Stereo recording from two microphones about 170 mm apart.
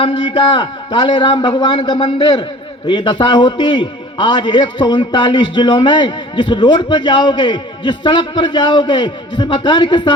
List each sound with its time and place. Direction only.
0.0 s a man's voice: 30° left (ahead or behind)